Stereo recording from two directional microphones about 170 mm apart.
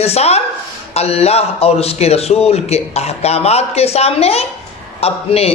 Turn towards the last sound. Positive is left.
turn(degrees=35)  # may be behind; listen again after turning